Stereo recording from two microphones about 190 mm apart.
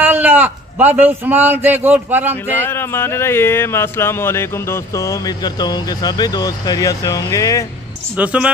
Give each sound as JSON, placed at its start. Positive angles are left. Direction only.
{"t": 0.0, "sound": "a man's voice", "side_deg": -10}
{"t": 2.5, "sound": "speech", "side_deg": 10}
{"t": 8.2, "sound": "speech", "side_deg": -5}